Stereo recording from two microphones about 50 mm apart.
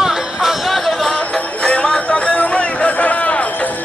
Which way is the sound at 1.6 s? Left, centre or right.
Left.